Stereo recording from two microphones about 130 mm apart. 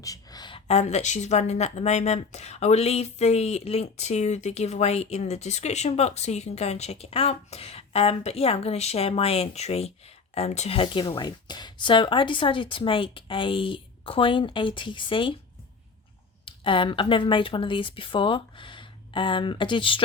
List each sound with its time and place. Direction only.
0.0 s a sound: 30° left (ahead or behind)
0.7 s speech: 55° left (ahead or behind); by 15.4 s 40° left (ahead or behind)
16.5 s speech: 40° left (ahead or behind)